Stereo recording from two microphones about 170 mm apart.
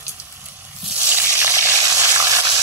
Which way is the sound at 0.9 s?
10° right (ahead or behind).